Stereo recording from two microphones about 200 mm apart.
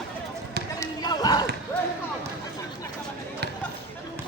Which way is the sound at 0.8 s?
20° left (ahead or behind).